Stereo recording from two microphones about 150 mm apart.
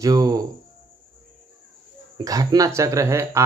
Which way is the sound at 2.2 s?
25° right (ahead or behind).